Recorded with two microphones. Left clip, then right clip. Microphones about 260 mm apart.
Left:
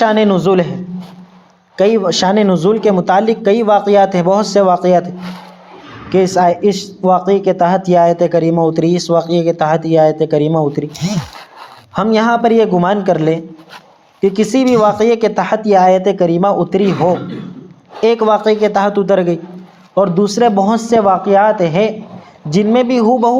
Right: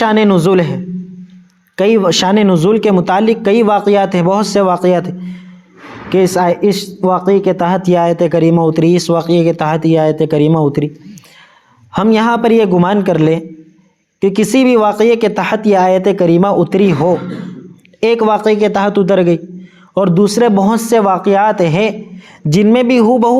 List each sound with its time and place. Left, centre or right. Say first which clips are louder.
0.0 s speech: even; right
11.9 s speech: right 1 dB; right